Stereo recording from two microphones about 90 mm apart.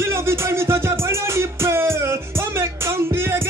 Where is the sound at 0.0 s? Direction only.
30° right (ahead or behind).